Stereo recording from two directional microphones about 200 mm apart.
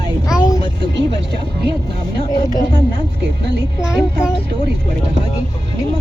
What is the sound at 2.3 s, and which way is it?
Speech, 20° left (ahead or behind).